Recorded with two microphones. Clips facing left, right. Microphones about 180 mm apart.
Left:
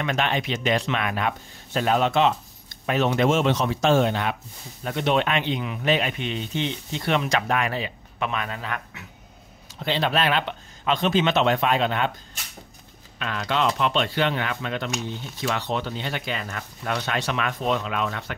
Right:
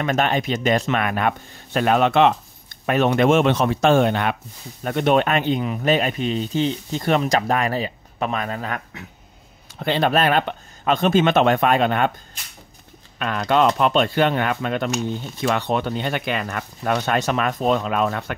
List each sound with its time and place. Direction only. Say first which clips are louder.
0.0 s speech: right 4 dB; 45° right (ahead or behind)
13.2 s speech: right 6 dB; 50° right (ahead or behind)